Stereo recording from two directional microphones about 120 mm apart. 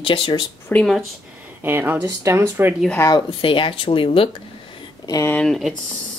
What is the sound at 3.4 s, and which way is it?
Speech, 45° left (ahead or behind).